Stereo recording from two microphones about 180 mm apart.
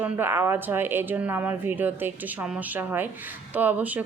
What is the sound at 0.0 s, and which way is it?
Speech, 10° right (ahead or behind).